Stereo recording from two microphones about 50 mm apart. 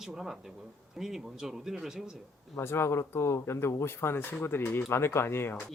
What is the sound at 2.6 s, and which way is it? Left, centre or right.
Speech, left.